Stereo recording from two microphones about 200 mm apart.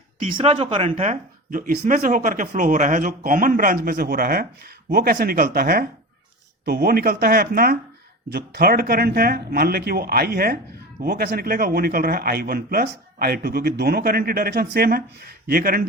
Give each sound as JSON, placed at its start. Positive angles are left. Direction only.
{"t": 0.3, "sound": "speech", "side_deg": -30}
{"t": 1.5, "sound": "speech", "side_deg": -45}